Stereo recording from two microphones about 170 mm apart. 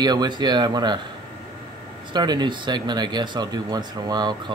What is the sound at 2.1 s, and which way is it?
Speech, 25° right (ahead or behind).